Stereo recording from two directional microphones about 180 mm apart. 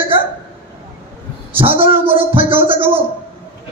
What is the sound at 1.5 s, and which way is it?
A man's voice, 30° right (ahead or behind).